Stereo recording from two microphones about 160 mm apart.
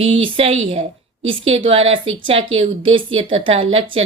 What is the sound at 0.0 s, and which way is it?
A woman's voice, 35° right (ahead or behind).